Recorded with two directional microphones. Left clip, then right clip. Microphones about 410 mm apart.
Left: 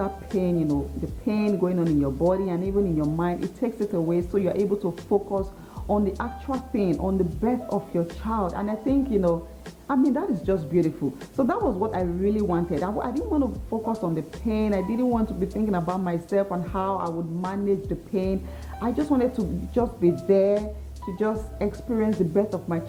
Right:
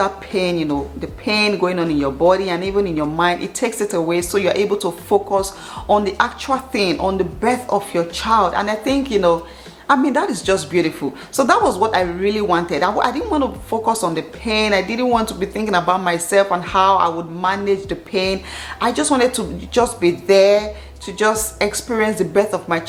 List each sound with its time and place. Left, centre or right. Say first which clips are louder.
0.0 s speech: right 9 dB; centre
4.8 s speech: right 8 dB; centre
11.6 s speech: right 10 dB; centre